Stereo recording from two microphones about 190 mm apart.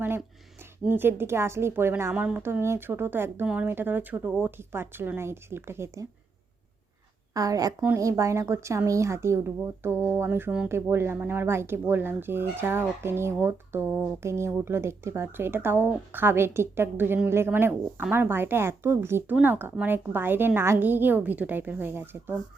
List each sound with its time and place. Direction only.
0.9 s a woman's voice: 10° right (ahead or behind)
7.3 s a woman's voice: 20° right (ahead or behind)